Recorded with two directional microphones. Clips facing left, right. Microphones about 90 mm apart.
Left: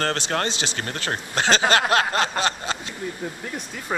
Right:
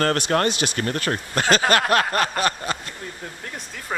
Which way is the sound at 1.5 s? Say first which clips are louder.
Right 1 dB; 25° left (ahead or behind).